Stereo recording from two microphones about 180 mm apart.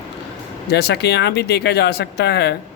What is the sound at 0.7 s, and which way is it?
Speech, 65° left (ahead or behind).